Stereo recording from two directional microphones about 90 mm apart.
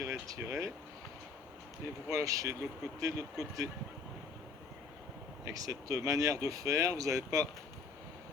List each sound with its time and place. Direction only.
0.0 s speech: 30° right (ahead or behind)
2.0 s speech: 35° right (ahead or behind)
5.5 s speech: 40° right (ahead or behind)